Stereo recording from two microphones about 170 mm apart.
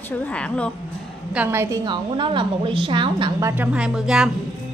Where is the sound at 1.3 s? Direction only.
15° right (ahead or behind); by 3.3 s 30° right (ahead or behind).